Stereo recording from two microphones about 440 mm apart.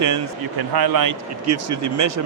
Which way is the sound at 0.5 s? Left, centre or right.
Right.